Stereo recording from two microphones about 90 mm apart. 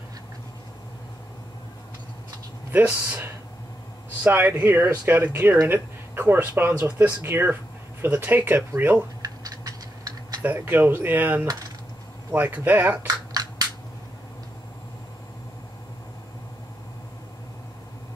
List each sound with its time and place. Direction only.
2.7 s speech: 20° right (ahead or behind)
9.2 s typing: 45° right (ahead or behind)
10.4 s speech: 20° right (ahead or behind)
13.0 s biting: 45° right (ahead or behind)